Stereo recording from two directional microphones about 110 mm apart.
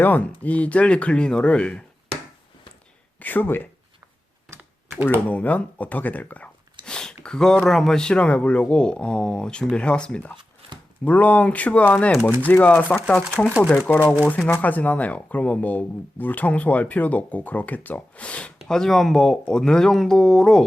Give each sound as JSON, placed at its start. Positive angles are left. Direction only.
{"t": 0.0, "sound": "speech", "side_deg": 15}
{"t": 3.2, "sound": "speech", "side_deg": 15}
{"t": 4.4, "sound": "computer keyboard", "side_deg": -25}
{"t": 5.3, "sound": "speech", "side_deg": 15}